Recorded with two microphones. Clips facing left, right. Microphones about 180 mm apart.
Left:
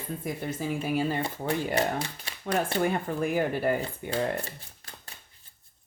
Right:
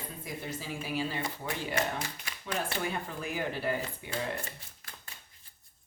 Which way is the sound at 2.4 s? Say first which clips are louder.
Left 8 dB; 55° left (ahead or behind).